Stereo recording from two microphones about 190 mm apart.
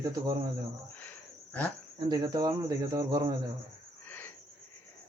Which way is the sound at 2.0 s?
20° right (ahead or behind).